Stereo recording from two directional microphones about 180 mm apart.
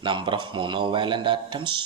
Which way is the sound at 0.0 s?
25° right (ahead or behind).